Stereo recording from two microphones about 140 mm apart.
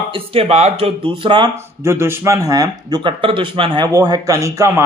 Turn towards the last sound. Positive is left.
turn(degrees=-20)  # may be behind; listen again after turning